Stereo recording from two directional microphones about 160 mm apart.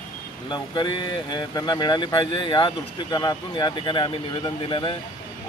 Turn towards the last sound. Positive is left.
turn(degrees=30)  # may be behind; listen again after turning